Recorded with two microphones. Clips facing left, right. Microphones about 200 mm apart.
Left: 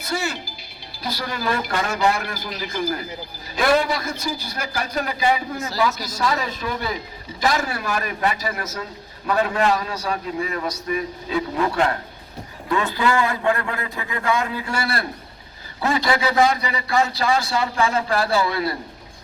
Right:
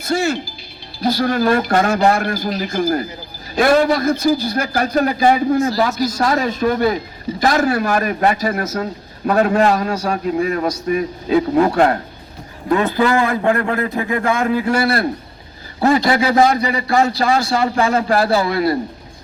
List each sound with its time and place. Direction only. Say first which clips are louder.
1.0 s a man's voice: right 10 dB; 50° right (ahead or behind)